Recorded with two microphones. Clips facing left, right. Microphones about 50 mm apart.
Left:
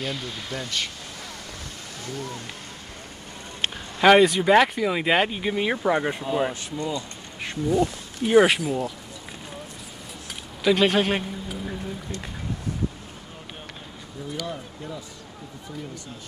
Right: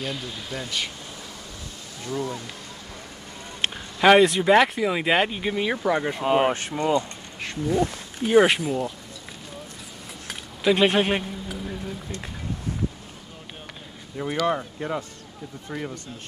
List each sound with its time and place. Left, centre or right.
0.0 s speech: centre
2.1 s speech: right
3.7 s a sound: centre
4.2 s speech: centre
6.2 s speech: right
8.3 s speech: centre
10.6 s speech: centre
11.4 s vehicle: centre
14.2 s speech: right